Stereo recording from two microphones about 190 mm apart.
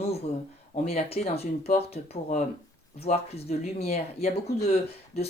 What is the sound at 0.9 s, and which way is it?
Speech, 30° left (ahead or behind).